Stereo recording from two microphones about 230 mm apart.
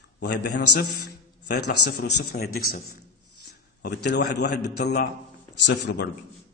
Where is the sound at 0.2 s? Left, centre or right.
Left.